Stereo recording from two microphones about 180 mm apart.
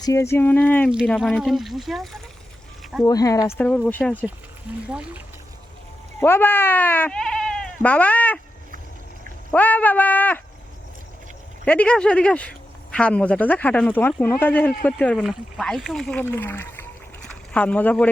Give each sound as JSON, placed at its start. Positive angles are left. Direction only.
{"t": 0.0, "sound": "speech", "side_deg": 15}
{"t": 3.0, "sound": "speech", "side_deg": 20}
{"t": 3.6, "sound": "speech", "side_deg": 10}
{"t": 4.9, "sound": "speech", "side_deg": -5}
{"t": 6.1, "sound": "speech", "side_deg": 10}
{"t": 9.5, "sound": "speech", "side_deg": 10}
{"t": 11.6, "sound": "speech", "side_deg": 5}